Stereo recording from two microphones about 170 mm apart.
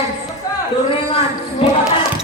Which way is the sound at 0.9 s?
35° left (ahead or behind).